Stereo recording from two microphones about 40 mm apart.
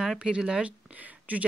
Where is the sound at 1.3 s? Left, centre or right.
Right.